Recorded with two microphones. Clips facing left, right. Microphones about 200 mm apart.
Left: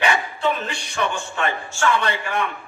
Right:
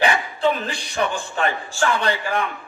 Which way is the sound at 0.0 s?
30° right (ahead or behind).